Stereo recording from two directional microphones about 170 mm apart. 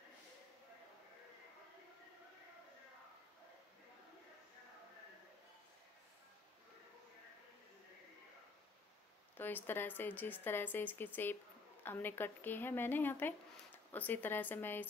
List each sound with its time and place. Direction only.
9.4 s speech: 10° left (ahead or behind)